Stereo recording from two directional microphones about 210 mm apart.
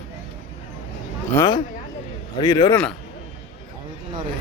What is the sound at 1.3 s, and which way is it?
A man's voice, 20° left (ahead or behind).